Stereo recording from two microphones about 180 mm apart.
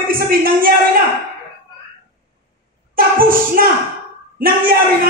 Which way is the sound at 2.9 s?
50° right (ahead or behind).